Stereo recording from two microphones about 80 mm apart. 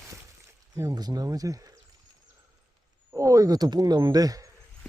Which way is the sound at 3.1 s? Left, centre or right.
Right.